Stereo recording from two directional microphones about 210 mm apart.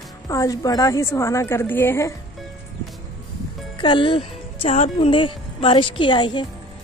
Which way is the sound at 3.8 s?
25° left (ahead or behind).